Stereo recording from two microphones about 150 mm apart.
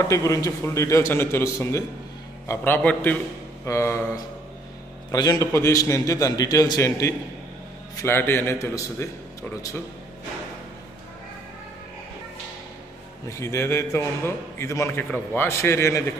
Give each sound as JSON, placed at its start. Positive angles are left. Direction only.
{"t": 0.0, "sound": "a man's voice", "side_deg": 20}
{"t": 13.3, "sound": "a man's voice", "side_deg": 20}